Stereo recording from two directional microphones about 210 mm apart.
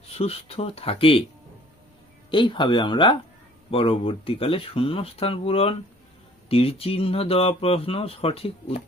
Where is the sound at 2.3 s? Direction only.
20° left (ahead or behind).